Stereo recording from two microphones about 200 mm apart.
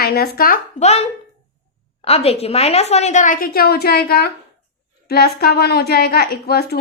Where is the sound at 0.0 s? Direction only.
50° left (ahead or behind).